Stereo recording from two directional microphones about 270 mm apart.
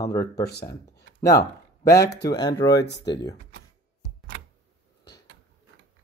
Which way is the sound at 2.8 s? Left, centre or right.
Left.